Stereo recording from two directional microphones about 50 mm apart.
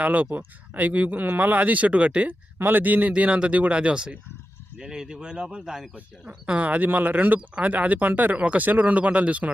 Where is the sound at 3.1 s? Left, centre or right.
Right.